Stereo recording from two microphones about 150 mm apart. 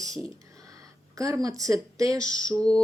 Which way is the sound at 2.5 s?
5° left (ahead or behind).